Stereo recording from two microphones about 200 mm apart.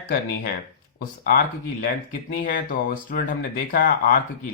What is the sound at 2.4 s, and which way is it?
Speech, 45° left (ahead or behind).